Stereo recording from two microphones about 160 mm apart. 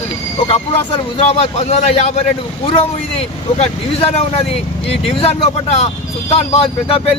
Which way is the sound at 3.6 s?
40° left (ahead or behind).